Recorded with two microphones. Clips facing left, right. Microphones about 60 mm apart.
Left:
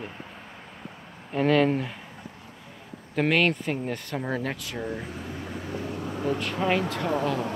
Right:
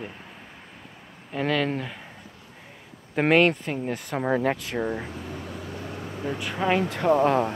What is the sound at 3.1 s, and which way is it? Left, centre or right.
Speech, centre.